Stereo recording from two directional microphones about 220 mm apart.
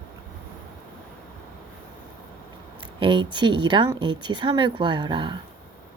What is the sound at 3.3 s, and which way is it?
Speech, 20° right (ahead or behind).